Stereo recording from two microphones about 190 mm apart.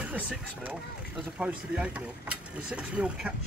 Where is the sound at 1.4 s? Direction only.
5° right (ahead or behind).